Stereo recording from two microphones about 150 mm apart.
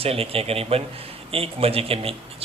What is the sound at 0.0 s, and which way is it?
A man's voice, 40° right (ahead or behind).